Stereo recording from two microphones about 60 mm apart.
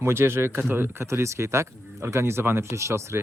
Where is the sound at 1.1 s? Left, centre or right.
Right.